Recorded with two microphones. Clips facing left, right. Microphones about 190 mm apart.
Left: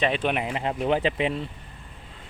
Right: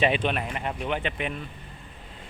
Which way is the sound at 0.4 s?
25° left (ahead or behind).